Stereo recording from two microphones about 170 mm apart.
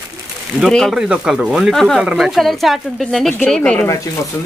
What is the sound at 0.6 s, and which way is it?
Speech, centre (ahead or behind).